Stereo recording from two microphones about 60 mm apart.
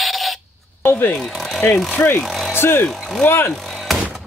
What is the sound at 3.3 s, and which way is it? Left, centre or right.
Speech, left.